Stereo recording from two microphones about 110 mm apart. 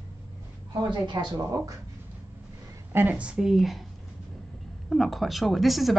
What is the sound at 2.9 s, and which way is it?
Speech, 15° right (ahead or behind).